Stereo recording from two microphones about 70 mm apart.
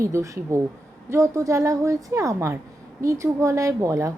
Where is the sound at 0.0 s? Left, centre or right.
Right.